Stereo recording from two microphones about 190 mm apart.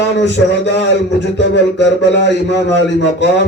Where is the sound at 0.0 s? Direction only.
65° left (ahead or behind).